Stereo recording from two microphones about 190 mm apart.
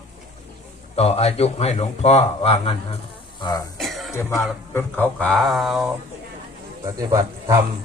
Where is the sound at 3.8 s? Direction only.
Centre (ahead or behind).